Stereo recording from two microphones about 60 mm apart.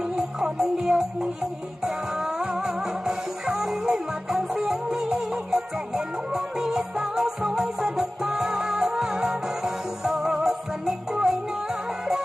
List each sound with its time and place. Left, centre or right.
0.2 s music: centre
2.4 s music: centre